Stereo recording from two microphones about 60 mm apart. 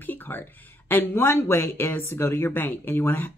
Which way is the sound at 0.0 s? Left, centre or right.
Left.